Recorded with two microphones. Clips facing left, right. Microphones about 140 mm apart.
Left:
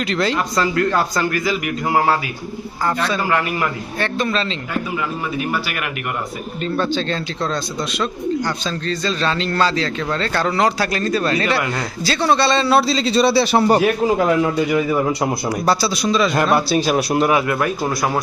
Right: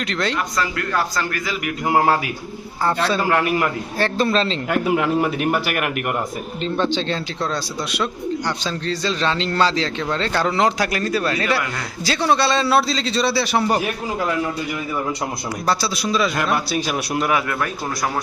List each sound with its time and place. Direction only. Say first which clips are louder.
0.1 s a man's voice: left 4 dB; 5° left (ahead or behind)
0.3 s a man's voice: left 5 dB; 30° left (ahead or behind)
1.1 s a man's voice: left 5 dB; 10° left (ahead or behind)
2.8 s a man's voice: right 1 dB; 30° right (ahead or behind)
4.7 s a man's voice: right 7 dB; 65° right (ahead or behind)
6.7 s speech: even; 20° right (ahead or behind)
8.9 s a man's voice: left 1 dB; 15° right (ahead or behind); by 13.4 s 15° left (ahead or behind)
13.4 s a man's voice: left 5 dB; 30° left (ahead or behind)
15.6 s a man's voice: left 3 dB; 5° left (ahead or behind)
16.0 s a man's voice: left 3 dB; 5° right (ahead or behind)
16.3 s a man's voice: left 5 dB; 35° left (ahead or behind)